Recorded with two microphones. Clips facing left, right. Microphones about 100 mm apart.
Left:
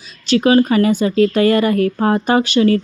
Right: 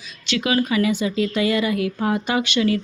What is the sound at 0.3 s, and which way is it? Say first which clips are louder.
Speech: left 9 dB; 40° left (ahead or behind).